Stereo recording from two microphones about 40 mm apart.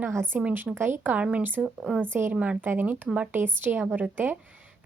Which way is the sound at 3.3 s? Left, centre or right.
Right.